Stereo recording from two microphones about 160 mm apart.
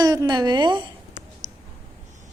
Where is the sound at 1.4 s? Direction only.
50° right (ahead or behind).